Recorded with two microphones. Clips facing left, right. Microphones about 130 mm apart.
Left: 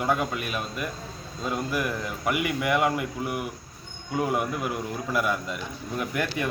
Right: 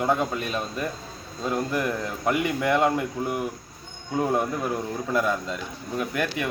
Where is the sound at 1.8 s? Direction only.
25° right (ahead or behind).